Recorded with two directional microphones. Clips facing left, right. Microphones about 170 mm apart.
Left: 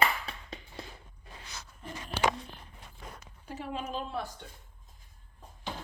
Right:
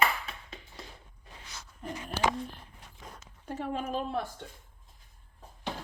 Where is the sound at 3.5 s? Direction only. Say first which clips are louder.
Right 3 dB; 50° right (ahead or behind).